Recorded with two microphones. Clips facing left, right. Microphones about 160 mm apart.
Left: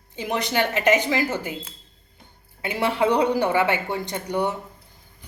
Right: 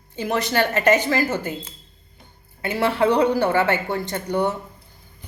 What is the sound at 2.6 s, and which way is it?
A woman's voice, 15° left (ahead or behind).